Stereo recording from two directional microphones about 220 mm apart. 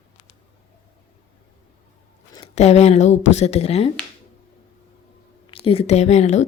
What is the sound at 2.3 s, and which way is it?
A woman's voice, 25° left (ahead or behind).